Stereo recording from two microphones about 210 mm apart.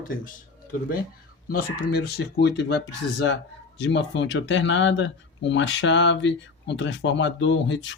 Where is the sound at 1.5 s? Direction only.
45° left (ahead or behind).